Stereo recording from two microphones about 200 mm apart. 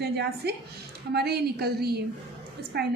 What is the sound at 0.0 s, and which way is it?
A woman's voice, 55° right (ahead or behind).